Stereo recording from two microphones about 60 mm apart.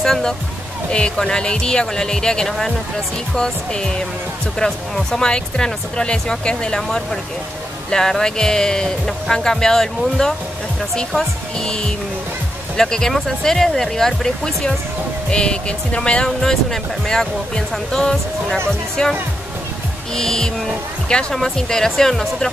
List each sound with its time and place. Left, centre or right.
0.0 s speech: centre
17.9 s speech: centre
20.2 s speech: centre